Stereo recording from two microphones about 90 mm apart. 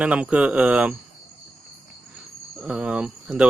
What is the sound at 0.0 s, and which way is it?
Speech, 15° right (ahead or behind).